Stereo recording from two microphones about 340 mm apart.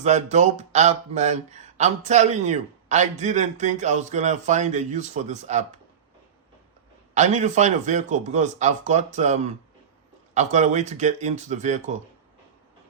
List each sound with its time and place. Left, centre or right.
0.0 s speech: centre
7.1 s speech: right